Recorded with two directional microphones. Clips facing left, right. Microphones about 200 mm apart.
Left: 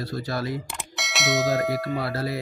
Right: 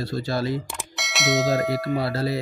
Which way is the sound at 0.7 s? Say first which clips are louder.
Right 1 dB; centre (ahead or behind).